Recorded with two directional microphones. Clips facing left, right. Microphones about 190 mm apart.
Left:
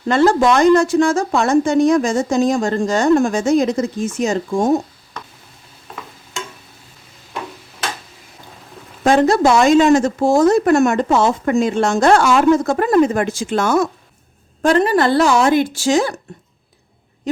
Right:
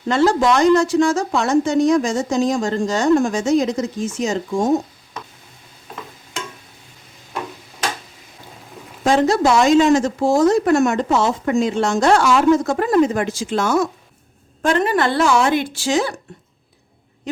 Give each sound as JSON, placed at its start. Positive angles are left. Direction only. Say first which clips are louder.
{"t": 0.1, "sound": "speech", "louder": "left 2 dB", "side_deg": 55}
{"t": 9.0, "sound": "speech", "louder": "left 2 dB", "side_deg": 55}
{"t": 14.6, "sound": "speech", "louder": "left 3 dB", "side_deg": 35}